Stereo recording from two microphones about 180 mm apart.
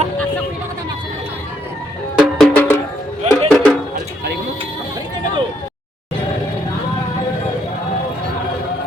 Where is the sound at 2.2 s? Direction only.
Centre (ahead or behind).